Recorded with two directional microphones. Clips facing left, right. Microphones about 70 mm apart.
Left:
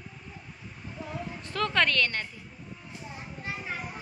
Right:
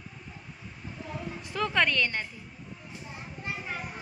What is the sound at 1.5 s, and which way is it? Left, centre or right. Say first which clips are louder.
Speech: even; centre.